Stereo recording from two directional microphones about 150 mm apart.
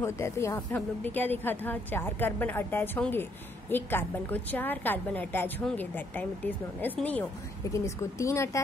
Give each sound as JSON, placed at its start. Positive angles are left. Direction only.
{"t": 0.0, "sound": "a woman's voice", "side_deg": 20}
{"t": 7.7, "sound": "a woman's voice", "side_deg": 20}